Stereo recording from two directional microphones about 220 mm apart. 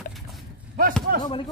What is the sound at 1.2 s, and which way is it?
Speech, 20° left (ahead or behind).